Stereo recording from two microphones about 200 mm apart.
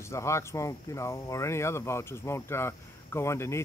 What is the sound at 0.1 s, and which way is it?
Speech, 15° left (ahead or behind).